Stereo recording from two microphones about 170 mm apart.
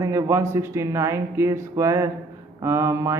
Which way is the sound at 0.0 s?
15° right (ahead or behind).